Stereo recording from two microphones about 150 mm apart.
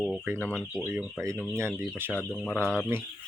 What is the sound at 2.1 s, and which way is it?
Speech, 10° left (ahead or behind).